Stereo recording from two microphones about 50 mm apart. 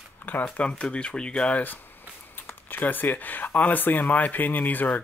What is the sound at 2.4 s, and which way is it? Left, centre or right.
Speech, left.